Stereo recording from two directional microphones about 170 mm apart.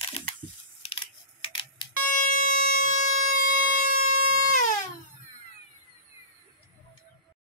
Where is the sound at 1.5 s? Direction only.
30° left (ahead or behind).